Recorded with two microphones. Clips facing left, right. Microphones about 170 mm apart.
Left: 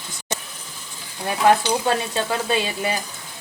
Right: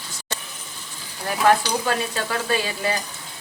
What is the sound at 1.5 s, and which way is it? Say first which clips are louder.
Stir: left 2 dB; 25° left (ahead or behind).